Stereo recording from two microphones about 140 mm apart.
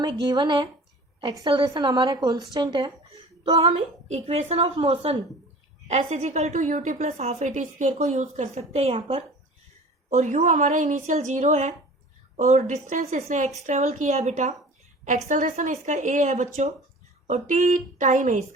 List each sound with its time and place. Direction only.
0.0 s a woman's voice: 30° right (ahead or behind)
3.4 s a woman's voice: 45° right (ahead or behind)
5.9 s a woman's voice: 55° right (ahead or behind)
10.1 s a woman's voice: 55° right (ahead or behind)